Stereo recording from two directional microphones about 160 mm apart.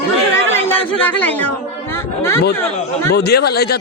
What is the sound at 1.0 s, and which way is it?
Speech, 10° left (ahead or behind).